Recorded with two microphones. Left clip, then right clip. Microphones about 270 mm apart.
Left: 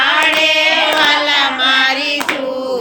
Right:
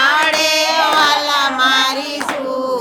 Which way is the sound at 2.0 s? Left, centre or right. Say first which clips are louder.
Left 4 dB; right.